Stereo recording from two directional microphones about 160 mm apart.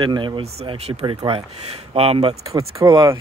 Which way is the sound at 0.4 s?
40° right (ahead or behind).